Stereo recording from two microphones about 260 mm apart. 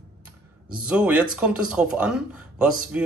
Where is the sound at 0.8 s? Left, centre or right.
Centre.